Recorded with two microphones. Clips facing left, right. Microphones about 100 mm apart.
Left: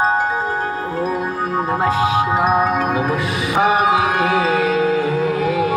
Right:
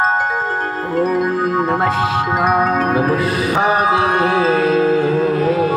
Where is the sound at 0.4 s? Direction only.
40° right (ahead or behind); by 2.3 s 60° right (ahead or behind).